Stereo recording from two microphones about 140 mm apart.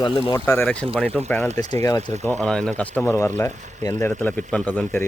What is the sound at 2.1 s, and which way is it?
Speech, 55° right (ahead or behind).